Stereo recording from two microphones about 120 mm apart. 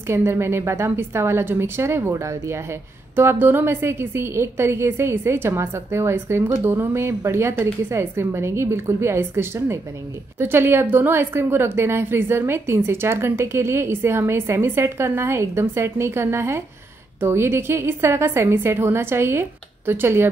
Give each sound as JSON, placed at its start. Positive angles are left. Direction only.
{"t": 0.1, "sound": "a woman's voice", "side_deg": -20}